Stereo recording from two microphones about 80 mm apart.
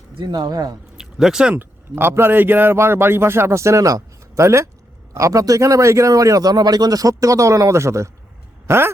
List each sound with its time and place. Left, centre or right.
0.2 s speech: right
0.9 s a sound: centre
1.5 s a man's voice: right